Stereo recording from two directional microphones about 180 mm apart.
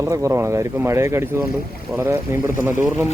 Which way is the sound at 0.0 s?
15° right (ahead or behind).